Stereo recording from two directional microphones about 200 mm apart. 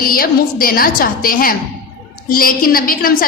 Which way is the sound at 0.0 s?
45° left (ahead or behind).